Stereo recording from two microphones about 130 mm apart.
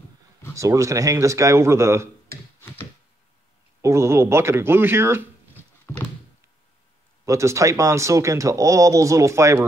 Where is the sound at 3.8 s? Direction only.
20° right (ahead or behind).